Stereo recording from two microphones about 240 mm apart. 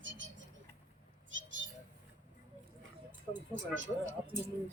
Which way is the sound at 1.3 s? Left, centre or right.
Right.